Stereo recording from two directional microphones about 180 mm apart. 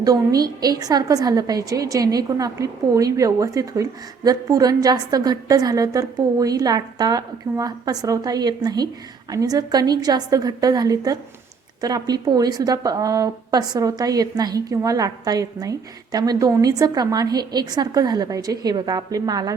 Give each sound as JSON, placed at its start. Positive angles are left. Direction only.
{"t": 0.0, "sound": "a woman's voice", "side_deg": -20}